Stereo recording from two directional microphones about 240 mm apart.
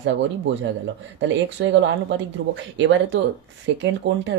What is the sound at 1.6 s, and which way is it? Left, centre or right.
Speech, right.